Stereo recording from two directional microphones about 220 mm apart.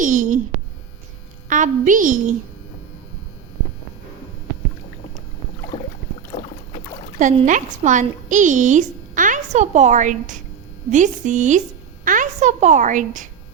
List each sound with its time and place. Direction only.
0.0 s a sound: 35° right (ahead or behind)
1.5 s a woman's voice: 35° right (ahead or behind)
5.7 s boat: 20° left (ahead or behind)
7.2 s a woman's voice: 35° right (ahead or behind)